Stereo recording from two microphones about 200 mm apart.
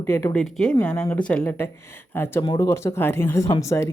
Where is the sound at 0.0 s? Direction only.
10° left (ahead or behind).